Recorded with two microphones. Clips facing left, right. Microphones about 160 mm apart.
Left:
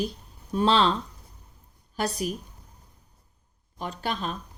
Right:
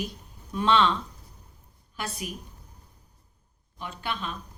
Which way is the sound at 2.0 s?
40° left (ahead or behind).